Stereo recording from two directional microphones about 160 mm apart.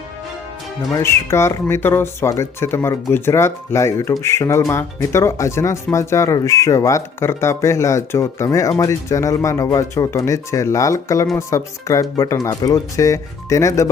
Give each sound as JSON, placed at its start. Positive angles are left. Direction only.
{"t": 0.9, "sound": "speech", "side_deg": 15}